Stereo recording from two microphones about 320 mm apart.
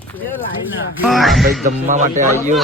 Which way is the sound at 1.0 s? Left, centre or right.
Centre.